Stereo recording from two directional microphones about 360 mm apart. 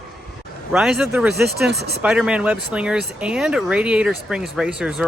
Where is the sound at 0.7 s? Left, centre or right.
Centre.